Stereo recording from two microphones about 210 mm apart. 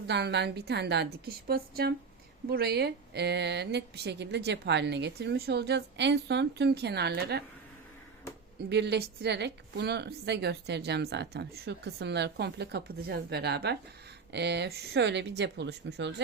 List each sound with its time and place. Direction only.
0.1 s a woman's voice: 55° right (ahead or behind)
8.7 s a woman's voice: 50° right (ahead or behind)